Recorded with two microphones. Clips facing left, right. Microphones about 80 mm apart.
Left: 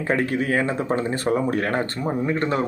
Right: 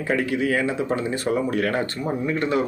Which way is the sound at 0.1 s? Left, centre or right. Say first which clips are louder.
Even; left.